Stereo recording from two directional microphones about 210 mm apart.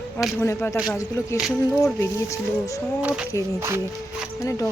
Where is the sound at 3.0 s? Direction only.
5° right (ahead or behind).